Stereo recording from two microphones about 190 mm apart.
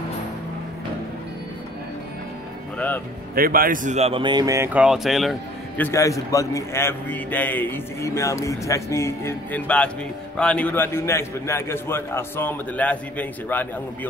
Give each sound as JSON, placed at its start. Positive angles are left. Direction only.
{"t": 3.3, "sound": "speech", "side_deg": -50}
{"t": 4.7, "sound": "speech", "side_deg": 0}
{"t": 5.8, "sound": "a man's voice", "side_deg": 15}